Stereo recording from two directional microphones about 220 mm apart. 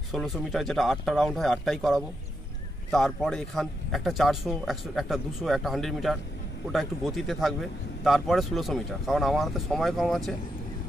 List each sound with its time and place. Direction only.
0.1 s speech: centre (ahead or behind)